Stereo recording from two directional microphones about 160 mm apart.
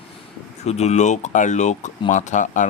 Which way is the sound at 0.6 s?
45° left (ahead or behind).